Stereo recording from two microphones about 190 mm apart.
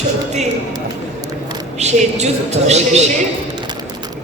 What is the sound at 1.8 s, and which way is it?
A man's voice, 35° right (ahead or behind).